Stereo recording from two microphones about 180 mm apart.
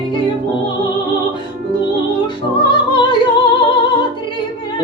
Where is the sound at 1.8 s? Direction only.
25° left (ahead or behind).